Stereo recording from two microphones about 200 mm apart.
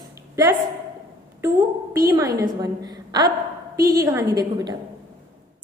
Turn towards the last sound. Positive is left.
turn(degrees=-20)  # may be behind; listen again after turning